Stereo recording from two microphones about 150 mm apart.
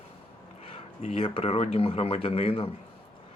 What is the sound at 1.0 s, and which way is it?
Speech, 50° left (ahead or behind).